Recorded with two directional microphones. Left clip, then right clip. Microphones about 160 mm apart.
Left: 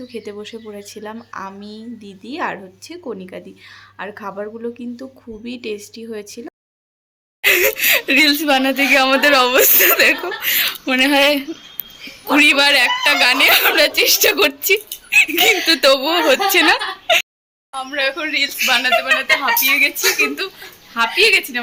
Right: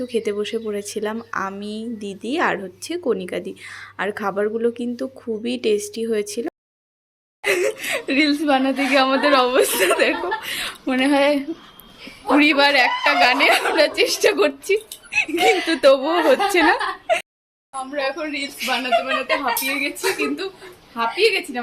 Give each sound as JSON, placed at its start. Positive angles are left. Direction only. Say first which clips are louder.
{"t": 0.1, "sound": "a woman's voice", "louder": "right 8 dB", "side_deg": -20}
{"t": 7.4, "sound": "a sound", "louder": "left 7 dB", "side_deg": 0}
{"t": 8.4, "sound": "a woman's voice", "louder": "left 3 dB", "side_deg": 0}